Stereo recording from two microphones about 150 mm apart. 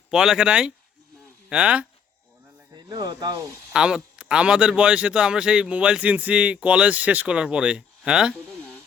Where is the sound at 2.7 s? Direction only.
30° right (ahead or behind).